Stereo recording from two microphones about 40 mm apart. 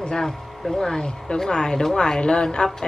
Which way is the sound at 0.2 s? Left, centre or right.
Centre.